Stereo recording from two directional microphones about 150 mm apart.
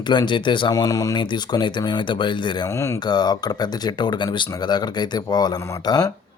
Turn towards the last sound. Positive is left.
turn(degrees=25)  # may be behind; listen again after turning